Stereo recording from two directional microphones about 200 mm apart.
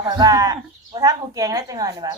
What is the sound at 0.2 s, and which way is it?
A woman's voice, 20° right (ahead or behind).